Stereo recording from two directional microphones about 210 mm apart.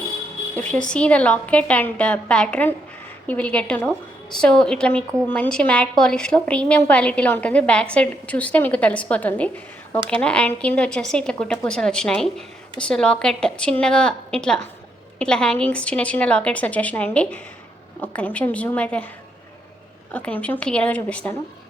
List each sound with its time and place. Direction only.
0.5 s a woman's voice: 5° left (ahead or behind)
20.1 s a woman's voice: 10° left (ahead or behind)